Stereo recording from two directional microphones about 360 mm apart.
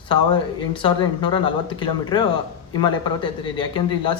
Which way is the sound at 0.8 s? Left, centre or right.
Centre.